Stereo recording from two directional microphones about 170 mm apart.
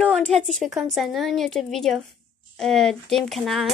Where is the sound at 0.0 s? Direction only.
5° left (ahead or behind).